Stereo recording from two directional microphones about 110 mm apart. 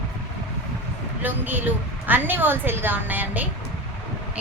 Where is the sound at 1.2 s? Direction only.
15° right (ahead or behind).